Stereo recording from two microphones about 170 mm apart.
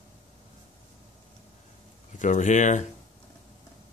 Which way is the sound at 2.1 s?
45° left (ahead or behind).